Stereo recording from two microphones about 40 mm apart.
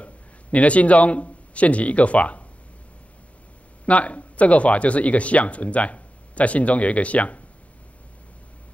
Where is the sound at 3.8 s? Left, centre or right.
Left.